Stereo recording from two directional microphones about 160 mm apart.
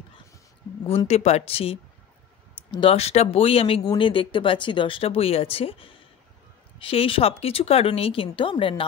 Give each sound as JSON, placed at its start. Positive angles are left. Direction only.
{"t": 0.8, "sound": "speech", "side_deg": 40}